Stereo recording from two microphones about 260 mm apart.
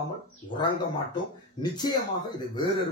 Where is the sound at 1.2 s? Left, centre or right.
Centre.